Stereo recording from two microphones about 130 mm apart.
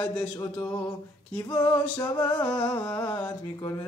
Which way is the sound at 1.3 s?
15° left (ahead or behind).